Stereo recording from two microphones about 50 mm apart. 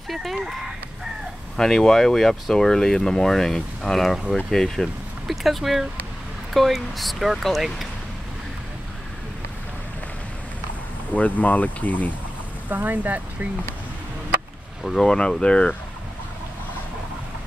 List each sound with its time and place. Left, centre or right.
0.1 s speech: centre
1.6 s speech: centre
11.1 s speech: left
12.6 s speech: right
14.8 s speech: centre
15.0 s speech: centre